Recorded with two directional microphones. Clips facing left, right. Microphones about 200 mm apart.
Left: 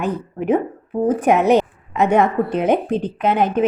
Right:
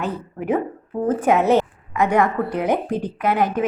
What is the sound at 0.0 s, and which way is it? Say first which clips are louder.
Speech: left 4 dB; 20° left (ahead or behind).